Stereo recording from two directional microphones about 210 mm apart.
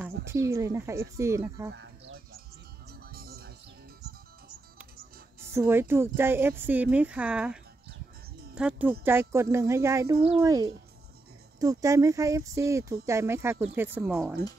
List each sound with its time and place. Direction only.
0.0 s speech: 15° right (ahead or behind)
1.7 s a sound: 55° right (ahead or behind)
2.9 s music: 45° right (ahead or behind)
5.5 s speech: 10° right (ahead or behind)
8.5 s speech: 5° right (ahead or behind)